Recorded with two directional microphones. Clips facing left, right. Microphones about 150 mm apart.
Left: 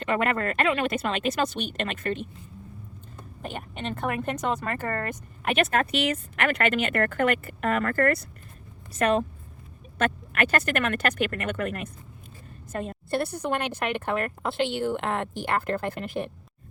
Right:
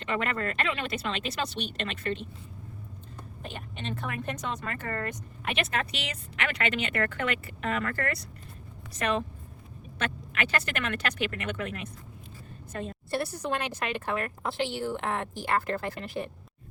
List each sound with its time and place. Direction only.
0.0 s speech: 50° left (ahead or behind)
3.4 s a woman's voice: 55° left (ahead or behind)